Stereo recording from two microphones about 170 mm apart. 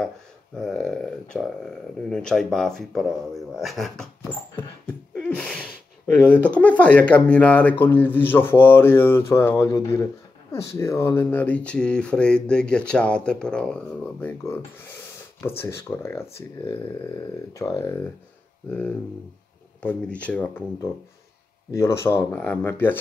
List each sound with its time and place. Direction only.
0.6 s speech: 5° left (ahead or behind)
5.1 s gasp: 5° left (ahead or behind)
6.6 s speech: 10° left (ahead or behind)
20.2 s speech: 10° left (ahead or behind)